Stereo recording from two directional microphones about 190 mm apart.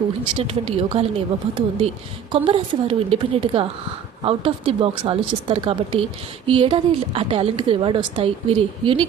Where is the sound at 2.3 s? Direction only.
30° right (ahead or behind).